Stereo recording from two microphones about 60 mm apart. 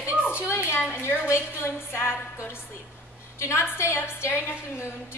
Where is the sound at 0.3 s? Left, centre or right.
Left.